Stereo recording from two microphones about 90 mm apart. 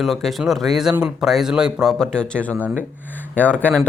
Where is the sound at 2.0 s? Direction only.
10° left (ahead or behind).